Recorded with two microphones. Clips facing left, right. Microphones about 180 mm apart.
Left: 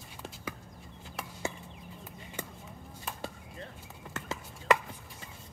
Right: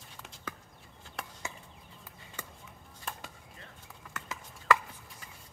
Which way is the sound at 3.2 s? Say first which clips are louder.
Left 8 dB; 30° left (ahead or behind).